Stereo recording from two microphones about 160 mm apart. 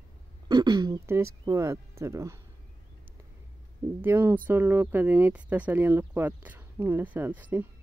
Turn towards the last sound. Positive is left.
turn(degrees=-10)  # may be behind; listen again after turning